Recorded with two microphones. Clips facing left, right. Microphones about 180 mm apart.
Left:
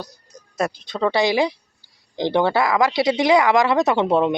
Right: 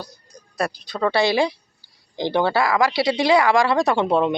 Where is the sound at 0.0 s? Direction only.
20° left (ahead or behind).